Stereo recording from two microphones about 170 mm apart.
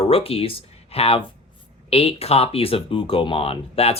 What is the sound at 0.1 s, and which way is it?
Speech, 35° left (ahead or behind).